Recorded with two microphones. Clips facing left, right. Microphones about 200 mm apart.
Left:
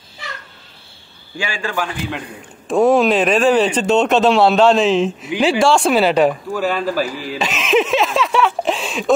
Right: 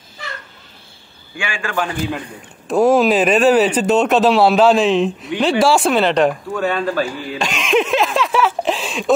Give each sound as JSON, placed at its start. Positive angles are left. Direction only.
{"t": 1.4, "sound": "a man's voice", "side_deg": 40}
{"t": 2.7, "sound": "speech", "side_deg": 0}